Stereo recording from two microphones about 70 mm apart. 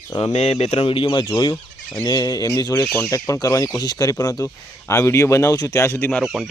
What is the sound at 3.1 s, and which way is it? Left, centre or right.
Speech, left.